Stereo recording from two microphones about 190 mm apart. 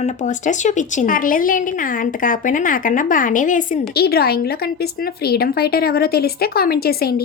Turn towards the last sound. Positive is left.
turn(degrees=55)  # may be behind; listen again after turning